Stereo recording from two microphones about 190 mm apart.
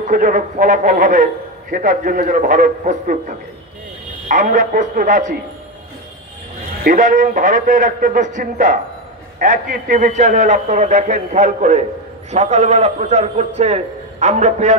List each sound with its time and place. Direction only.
0.1 s a man's voice: 45° right (ahead or behind)
6.8 s a man's voice: 45° right (ahead or behind)